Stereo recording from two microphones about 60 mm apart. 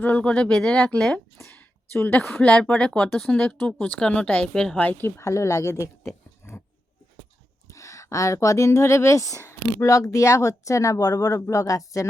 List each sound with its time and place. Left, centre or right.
0.0 s speech: left
1.5 s a sound: left
2.3 s speech: left
4.8 s speech: left
5.2 s speech: left
6.0 s a sound: left
7.7 s speech: left